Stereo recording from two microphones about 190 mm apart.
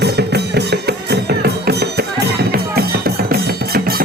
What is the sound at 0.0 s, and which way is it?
Music, 60° right (ahead or behind).